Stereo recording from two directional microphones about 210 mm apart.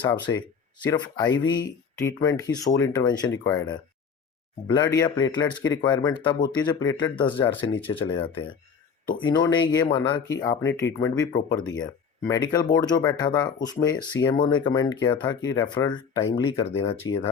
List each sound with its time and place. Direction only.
0.3 s speech: 15° left (ahead or behind)